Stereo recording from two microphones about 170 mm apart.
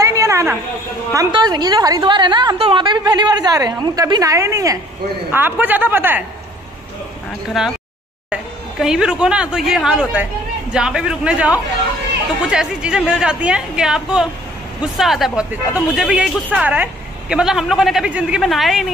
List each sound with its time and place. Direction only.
0.0 s a sound: 20° right (ahead or behind)
1.1 s a woman's voice: 25° right (ahead or behind)
7.6 s speech: centre (ahead or behind)